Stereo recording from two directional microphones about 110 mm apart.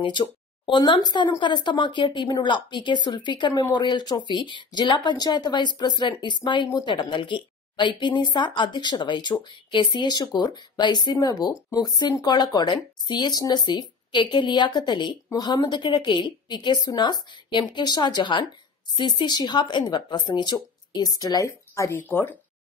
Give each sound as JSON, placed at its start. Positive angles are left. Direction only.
{"t": 0.0, "sound": "a woman's voice", "side_deg": 45}